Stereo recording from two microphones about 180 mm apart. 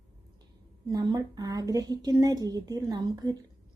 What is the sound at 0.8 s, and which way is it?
A woman's voice, 20° right (ahead or behind).